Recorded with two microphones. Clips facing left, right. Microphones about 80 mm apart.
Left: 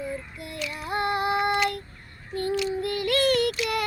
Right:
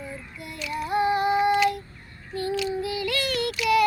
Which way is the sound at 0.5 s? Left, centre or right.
Left.